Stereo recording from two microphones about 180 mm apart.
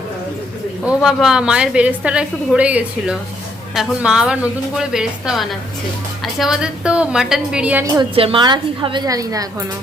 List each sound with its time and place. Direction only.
0.9 s a woman's voice: 5° right (ahead or behind)
7.9 s a woman's voice: 30° right (ahead or behind)